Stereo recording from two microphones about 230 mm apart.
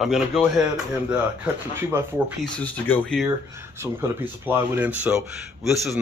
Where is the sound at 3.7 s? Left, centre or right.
Centre.